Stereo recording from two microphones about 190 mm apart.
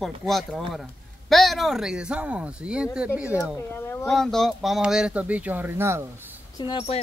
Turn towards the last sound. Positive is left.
turn(degrees=30)  # may be behind; listen again after turning